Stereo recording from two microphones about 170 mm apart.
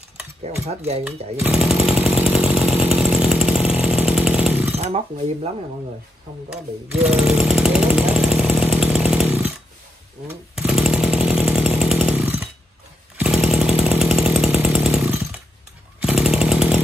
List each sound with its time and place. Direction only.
0.7 s speech: 40° right (ahead or behind)
1.0 s chainsaw: 5° right (ahead or behind)
4.7 s speech: 35° right (ahead or behind)
6.5 s chainsaw: 5° right (ahead or behind)
10.5 s chainsaw: 5° right (ahead or behind)